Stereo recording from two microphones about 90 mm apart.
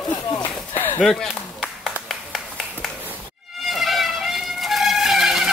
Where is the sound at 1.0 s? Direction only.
Centre (ahead or behind).